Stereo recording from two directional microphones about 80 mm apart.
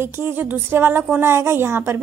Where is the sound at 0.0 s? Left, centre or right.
Right.